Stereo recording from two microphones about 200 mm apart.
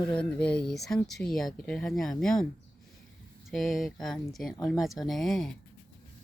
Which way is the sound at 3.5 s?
Centre (ahead or behind).